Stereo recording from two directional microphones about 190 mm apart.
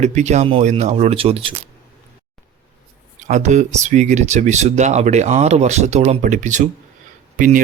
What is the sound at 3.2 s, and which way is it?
Speech, 40° right (ahead or behind).